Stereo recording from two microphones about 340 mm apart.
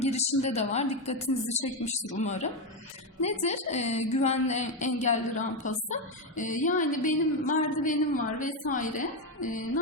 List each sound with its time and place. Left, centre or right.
0.0 s a woman's voice: centre